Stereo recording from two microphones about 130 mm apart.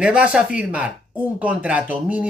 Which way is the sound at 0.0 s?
10° right (ahead or behind).